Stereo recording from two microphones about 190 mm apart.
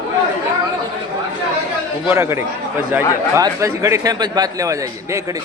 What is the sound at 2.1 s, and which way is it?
A man's voice, 15° right (ahead or behind).